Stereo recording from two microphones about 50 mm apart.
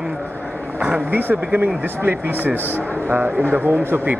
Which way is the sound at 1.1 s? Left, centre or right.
Right.